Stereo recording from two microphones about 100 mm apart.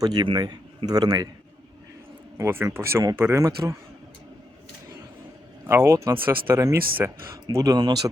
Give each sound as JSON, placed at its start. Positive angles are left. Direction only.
{"t": 0.0, "sound": "speech", "side_deg": -45}
{"t": 2.4, "sound": "speech", "side_deg": -25}
{"t": 3.2, "sound": "speech", "side_deg": -20}
{"t": 3.4, "sound": "speech", "side_deg": -30}
{"t": 5.6, "sound": "speech", "side_deg": -30}